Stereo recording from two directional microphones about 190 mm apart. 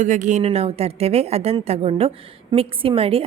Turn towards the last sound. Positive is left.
turn(degrees=-30)  # may be behind; listen again after turning